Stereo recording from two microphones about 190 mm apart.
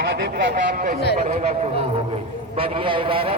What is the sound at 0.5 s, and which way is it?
Speech, 45° right (ahead or behind).